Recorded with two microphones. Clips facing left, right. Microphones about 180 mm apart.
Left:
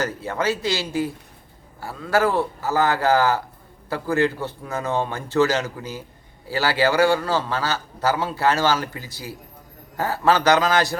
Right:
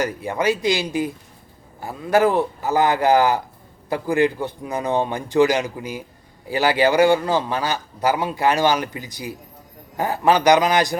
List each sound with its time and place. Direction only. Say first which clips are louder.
0.0 s a man's voice: right 3 dB; 15° right (ahead or behind)